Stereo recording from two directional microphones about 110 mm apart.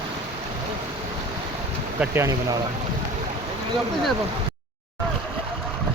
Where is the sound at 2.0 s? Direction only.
25° right (ahead or behind).